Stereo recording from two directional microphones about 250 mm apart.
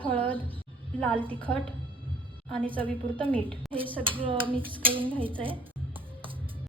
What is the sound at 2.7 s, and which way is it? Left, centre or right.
Speech, right.